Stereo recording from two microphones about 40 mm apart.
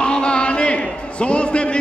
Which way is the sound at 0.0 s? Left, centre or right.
Left.